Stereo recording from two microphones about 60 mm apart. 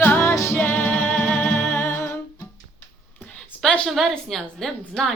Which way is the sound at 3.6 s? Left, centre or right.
Centre.